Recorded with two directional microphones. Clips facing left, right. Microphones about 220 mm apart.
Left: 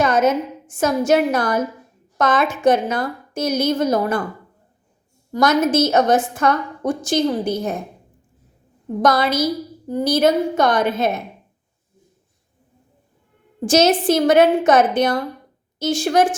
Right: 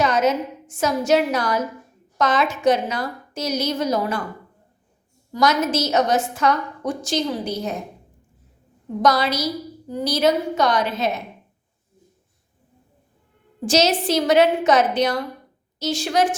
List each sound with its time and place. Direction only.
0.0 s a woman's voice: 50° left (ahead or behind)
5.3 s a woman's voice: 50° left (ahead or behind)
9.0 s a woman's voice: 50° left (ahead or behind)
13.7 s a woman's voice: 50° left (ahead or behind)